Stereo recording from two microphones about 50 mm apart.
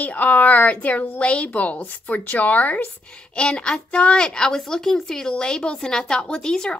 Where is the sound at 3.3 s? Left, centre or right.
Centre.